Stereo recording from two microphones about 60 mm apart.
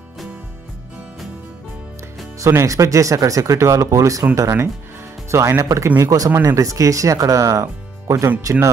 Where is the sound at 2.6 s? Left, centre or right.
Right.